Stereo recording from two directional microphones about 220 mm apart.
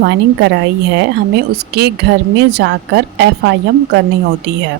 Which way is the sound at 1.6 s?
50° right (ahead or behind).